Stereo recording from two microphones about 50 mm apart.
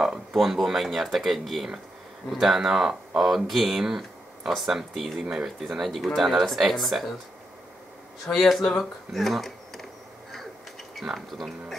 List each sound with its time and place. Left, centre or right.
0.0 s speech: centre
5.9 s speech: centre
8.3 s speech: centre
11.0 s speech: centre